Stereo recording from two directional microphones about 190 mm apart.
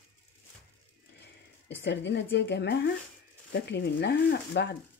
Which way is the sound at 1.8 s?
65° left (ahead or behind).